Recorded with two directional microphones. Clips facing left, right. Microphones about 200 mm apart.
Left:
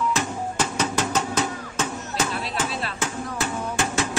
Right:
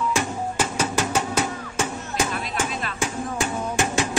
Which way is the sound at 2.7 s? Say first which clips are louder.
Even; 30° left (ahead or behind).